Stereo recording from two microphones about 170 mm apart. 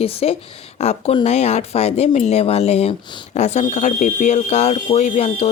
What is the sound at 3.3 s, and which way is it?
Speech, 40° left (ahead or behind).